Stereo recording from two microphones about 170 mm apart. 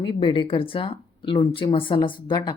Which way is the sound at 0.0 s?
30° left (ahead or behind).